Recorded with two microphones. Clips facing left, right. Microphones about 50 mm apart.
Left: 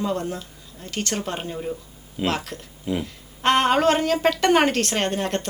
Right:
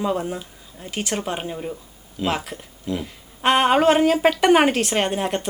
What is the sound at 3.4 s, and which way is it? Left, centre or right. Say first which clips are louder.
A woman's voice: right 2 dB; centre.